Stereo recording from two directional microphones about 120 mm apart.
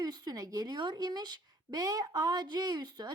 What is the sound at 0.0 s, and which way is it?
Speech, 30° right (ahead or behind).